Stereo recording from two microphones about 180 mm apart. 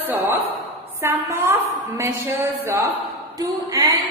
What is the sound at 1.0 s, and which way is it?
A woman's voice, 15° right (ahead or behind).